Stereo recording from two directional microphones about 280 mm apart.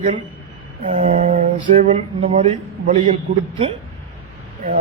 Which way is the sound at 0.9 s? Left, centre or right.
Right.